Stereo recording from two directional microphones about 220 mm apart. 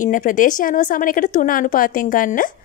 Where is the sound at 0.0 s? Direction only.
35° left (ahead or behind).